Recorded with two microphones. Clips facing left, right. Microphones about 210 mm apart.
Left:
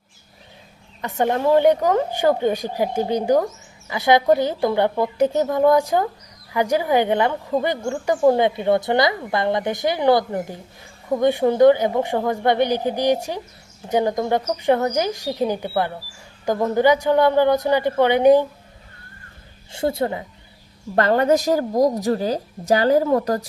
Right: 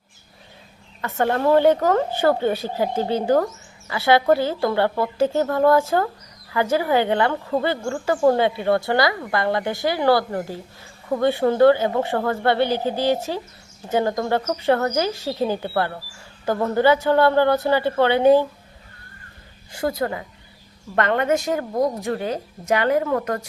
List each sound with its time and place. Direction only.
1.0 s speech: 15° left (ahead or behind)
19.7 s a woman's voice: 25° left (ahead or behind)